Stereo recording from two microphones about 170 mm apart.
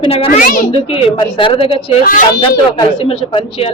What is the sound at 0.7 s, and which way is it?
A woman's voice, 35° left (ahead or behind).